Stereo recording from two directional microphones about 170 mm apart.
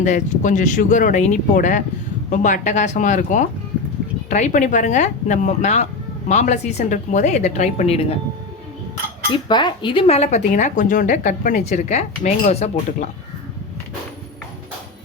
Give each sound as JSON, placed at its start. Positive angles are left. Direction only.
{"t": 0.0, "sound": "speech", "side_deg": 45}
{"t": 9.3, "sound": "speech", "side_deg": 25}